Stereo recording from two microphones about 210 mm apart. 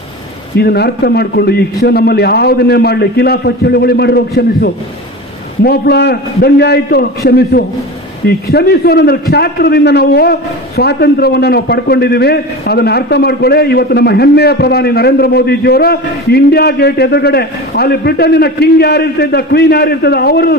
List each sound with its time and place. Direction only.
0.6 s a man's voice: 50° left (ahead or behind)